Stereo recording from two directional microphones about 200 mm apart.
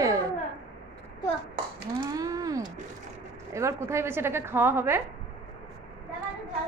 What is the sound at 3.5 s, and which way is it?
A woman's voice, 15° right (ahead or behind).